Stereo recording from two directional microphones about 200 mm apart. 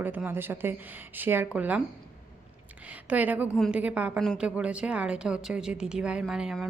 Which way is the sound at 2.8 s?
10° right (ahead or behind).